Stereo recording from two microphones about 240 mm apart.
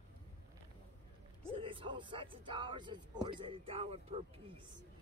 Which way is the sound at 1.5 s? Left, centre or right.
Right.